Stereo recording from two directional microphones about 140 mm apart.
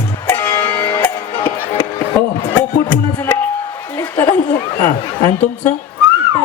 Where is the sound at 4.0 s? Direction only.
15° left (ahead or behind).